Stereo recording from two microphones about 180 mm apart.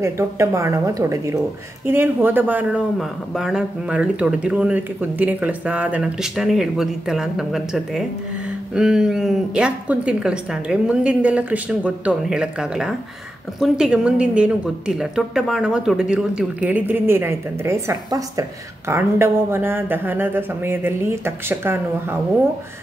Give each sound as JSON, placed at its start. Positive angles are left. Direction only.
{"t": 0.0, "sound": "a woman's voice", "side_deg": -15}